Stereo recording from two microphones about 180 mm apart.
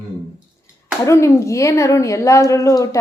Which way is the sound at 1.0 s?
15° left (ahead or behind).